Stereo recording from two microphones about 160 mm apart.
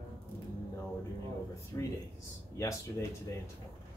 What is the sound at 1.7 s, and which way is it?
Speech, 15° left (ahead or behind).